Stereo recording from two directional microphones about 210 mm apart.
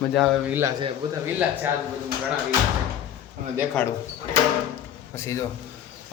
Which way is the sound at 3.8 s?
5° left (ahead or behind).